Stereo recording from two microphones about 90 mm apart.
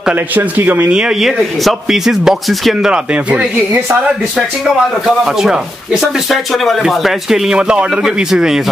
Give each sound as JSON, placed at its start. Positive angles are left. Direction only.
{"t": 0.1, "sound": "a man's voice", "side_deg": -20}
{"t": 5.0, "sound": "a man's voice", "side_deg": -5}